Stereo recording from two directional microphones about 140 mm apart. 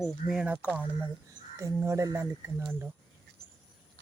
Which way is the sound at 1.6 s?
20° right (ahead or behind).